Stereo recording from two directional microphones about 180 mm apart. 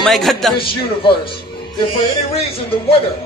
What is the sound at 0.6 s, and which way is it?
Speech, 30° left (ahead or behind).